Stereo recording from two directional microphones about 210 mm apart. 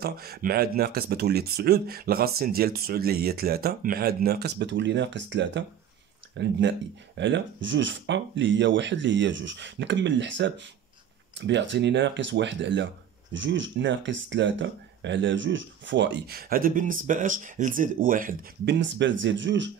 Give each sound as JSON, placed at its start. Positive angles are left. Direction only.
{"t": 0.0, "sound": "speech", "side_deg": -50}
{"t": 18.8, "sound": "speech", "side_deg": -60}